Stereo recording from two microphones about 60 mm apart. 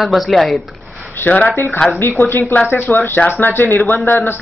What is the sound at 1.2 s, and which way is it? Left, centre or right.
Speech, left.